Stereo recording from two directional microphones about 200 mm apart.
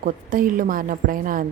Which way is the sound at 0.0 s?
45° right (ahead or behind).